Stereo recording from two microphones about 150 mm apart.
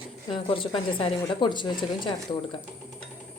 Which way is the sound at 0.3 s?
35° left (ahead or behind).